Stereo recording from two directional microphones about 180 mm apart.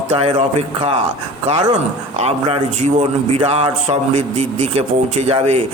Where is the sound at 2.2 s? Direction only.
35° right (ahead or behind).